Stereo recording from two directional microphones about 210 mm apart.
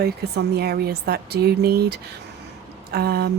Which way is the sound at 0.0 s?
50° right (ahead or behind).